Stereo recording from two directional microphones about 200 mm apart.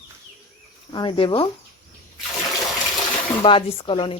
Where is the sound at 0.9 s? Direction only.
20° left (ahead or behind).